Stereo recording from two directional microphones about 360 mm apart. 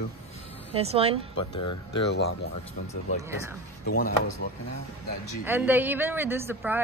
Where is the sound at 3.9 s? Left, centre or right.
Left.